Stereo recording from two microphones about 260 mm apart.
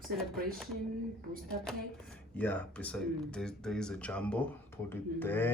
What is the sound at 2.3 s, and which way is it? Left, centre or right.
Speech, centre.